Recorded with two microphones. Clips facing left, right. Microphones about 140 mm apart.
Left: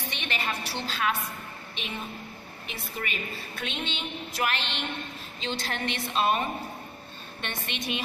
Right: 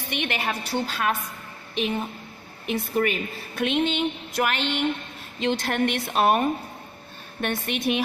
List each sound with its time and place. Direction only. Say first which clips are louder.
0.3 s a woman's voice: right 2 dB; 55° right (ahead or behind)
7.4 s a woman's voice: right 9 dB; 50° right (ahead or behind)